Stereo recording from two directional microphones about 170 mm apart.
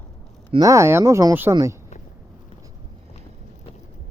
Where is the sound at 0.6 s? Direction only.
15° right (ahead or behind).